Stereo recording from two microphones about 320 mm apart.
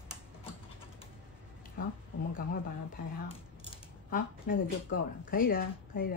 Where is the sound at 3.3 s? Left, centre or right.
Centre.